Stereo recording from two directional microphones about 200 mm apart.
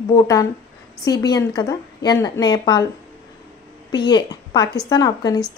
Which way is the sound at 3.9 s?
20° left (ahead or behind).